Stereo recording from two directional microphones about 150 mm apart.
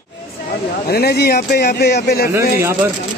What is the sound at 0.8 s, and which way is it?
Speech, 90° left.